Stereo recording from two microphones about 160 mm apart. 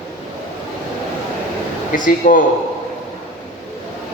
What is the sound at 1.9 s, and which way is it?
Speech, 55° left (ahead or behind).